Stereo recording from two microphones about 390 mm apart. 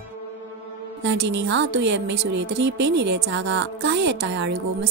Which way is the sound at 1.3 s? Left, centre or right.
Right.